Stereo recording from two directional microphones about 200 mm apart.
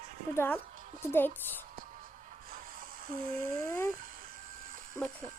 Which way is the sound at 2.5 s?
45° right (ahead or behind).